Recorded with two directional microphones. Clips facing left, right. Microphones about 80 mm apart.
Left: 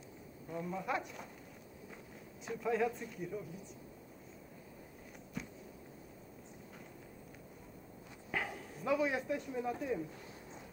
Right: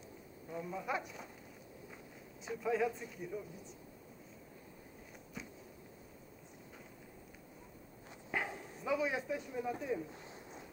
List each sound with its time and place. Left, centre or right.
0.5 s speech: centre
2.4 s speech: centre
5.4 s walk: centre
8.3 s dog: centre
8.7 s speech: centre